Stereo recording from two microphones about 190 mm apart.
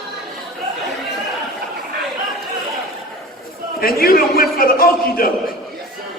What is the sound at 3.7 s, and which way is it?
A man's voice, 50° left (ahead or behind).